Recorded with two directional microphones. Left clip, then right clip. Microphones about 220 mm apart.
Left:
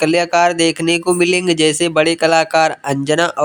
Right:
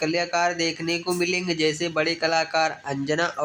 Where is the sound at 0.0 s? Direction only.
40° left (ahead or behind).